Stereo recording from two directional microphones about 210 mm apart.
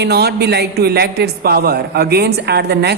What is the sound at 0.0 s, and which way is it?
A man's voice, 50° right (ahead or behind).